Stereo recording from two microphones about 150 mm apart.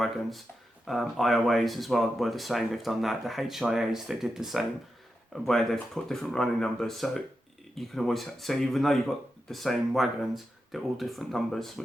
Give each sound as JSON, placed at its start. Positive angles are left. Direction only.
{"t": 0.0, "sound": "speech", "side_deg": 0}